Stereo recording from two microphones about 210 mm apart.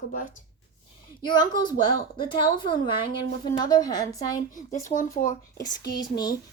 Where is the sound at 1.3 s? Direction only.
20° left (ahead or behind).